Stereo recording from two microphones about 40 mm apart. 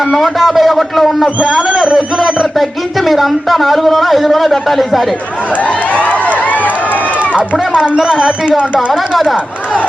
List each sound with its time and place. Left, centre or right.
0.0 s a man's voice: centre
1.6 s speech: right
2.6 s a man's voice: centre
5.6 s a sound: left
7.9 s speech: right